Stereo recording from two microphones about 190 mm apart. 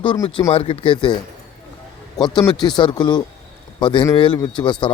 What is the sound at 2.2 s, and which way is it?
Speech, 20° left (ahead or behind).